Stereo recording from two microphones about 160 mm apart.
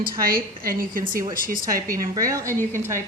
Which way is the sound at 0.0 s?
65° right (ahead or behind).